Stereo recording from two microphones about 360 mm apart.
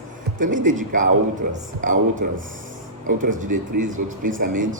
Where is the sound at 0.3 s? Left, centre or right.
Right.